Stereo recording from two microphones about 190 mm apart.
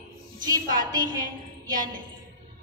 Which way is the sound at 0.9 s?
20° right (ahead or behind).